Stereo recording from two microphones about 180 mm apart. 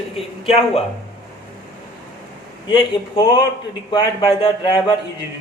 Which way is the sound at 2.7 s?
30° left (ahead or behind).